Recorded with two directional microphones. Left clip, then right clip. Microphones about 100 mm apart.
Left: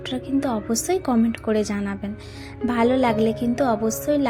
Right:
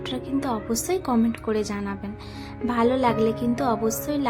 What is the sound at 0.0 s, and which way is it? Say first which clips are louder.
Speech: left 3 dB; 20° left (ahead or behind).